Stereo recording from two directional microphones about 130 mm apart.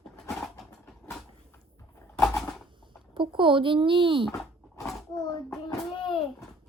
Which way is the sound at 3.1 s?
40° right (ahead or behind).